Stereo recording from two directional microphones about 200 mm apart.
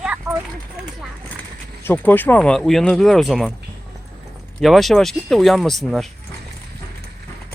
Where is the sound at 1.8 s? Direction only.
10° left (ahead or behind).